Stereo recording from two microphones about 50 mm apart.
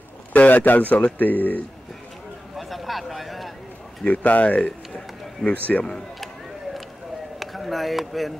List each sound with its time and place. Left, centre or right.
0.3 s speech: left
2.5 s a sound: centre
4.0 s speech: left
7.3 s speech: centre